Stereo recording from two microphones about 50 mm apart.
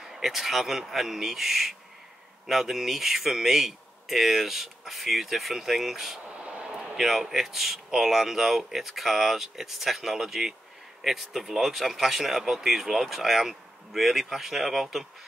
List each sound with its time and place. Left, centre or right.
0.0 s speech: centre
6.4 s a sound: centre
7.0 s speech: centre